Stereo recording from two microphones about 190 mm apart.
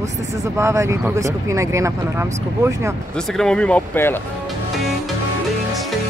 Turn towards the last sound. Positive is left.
turn(degrees=10)  # may be behind; listen again after turning